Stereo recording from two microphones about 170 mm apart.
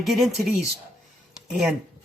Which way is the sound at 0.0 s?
Centre (ahead or behind).